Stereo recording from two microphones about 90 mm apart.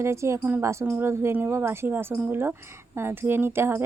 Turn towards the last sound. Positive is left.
turn(degrees=-25)  # may be behind; listen again after turning